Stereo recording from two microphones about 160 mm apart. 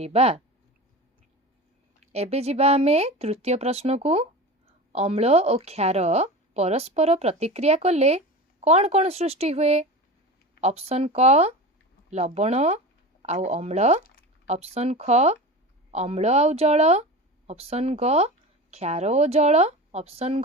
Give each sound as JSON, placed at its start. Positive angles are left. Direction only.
{"t": 0.0, "sound": "a woman's voice", "side_deg": -40}
{"t": 2.1, "sound": "a woman's voice", "side_deg": -40}